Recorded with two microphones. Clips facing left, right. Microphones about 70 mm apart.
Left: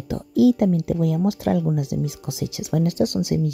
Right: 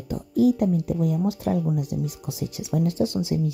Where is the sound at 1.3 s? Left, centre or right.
Left.